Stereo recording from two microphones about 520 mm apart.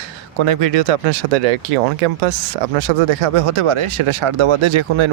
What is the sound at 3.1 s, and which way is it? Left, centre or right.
Speech, right.